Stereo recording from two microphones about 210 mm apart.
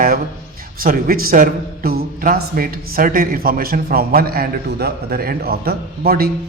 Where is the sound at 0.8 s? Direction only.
45° right (ahead or behind).